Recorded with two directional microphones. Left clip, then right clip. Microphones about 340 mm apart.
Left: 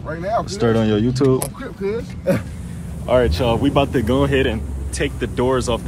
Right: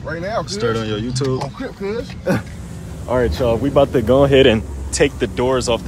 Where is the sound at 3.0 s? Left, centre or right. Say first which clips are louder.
Left 1 dB; centre; by 4.6 s right.